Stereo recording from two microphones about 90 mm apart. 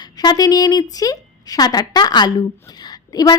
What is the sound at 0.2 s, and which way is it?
A woman's voice, 50° left (ahead or behind).